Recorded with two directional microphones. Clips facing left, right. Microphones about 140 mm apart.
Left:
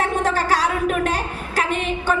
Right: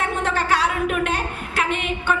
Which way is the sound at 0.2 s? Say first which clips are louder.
Even; 40° left (ahead or behind).